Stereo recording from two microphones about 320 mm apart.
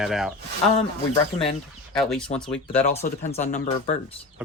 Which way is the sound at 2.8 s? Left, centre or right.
Centre.